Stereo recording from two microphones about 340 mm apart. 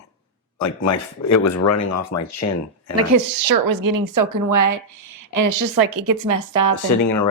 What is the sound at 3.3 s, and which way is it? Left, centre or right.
Speech, right.